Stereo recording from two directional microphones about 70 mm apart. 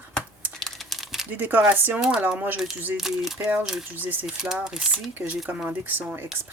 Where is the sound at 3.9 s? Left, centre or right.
Right.